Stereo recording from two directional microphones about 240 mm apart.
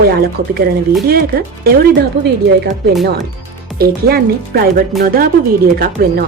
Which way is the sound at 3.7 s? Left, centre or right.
Right.